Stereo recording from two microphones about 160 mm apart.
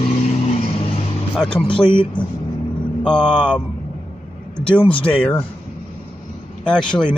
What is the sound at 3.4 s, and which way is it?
Speech, 5° left (ahead or behind).